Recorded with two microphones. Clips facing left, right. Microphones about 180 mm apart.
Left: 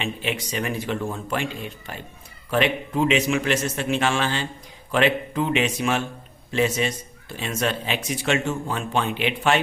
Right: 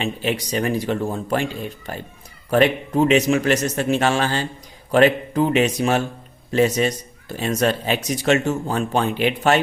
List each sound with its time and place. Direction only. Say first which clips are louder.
0.0 s a man's voice: right 4 dB; 40° right (ahead or behind)